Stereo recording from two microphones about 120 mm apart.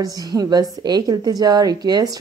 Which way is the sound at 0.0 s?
30° right (ahead or behind).